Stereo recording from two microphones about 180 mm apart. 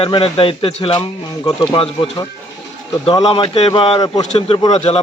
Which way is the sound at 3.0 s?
30° left (ahead or behind).